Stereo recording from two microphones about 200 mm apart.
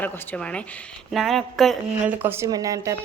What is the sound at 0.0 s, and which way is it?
A woman's voice, 5° left (ahead or behind).